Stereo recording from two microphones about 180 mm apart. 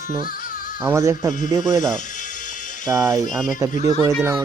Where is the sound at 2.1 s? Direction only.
45° left (ahead or behind).